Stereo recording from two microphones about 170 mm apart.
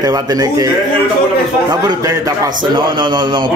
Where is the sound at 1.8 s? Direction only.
20° right (ahead or behind).